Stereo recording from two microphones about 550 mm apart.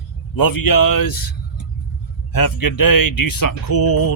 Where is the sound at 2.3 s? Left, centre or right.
Left.